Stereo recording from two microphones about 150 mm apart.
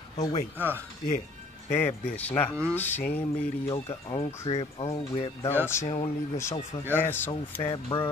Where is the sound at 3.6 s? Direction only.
40° left (ahead or behind).